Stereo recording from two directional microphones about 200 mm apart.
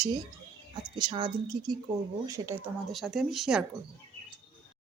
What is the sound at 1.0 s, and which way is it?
Speech, 25° right (ahead or behind).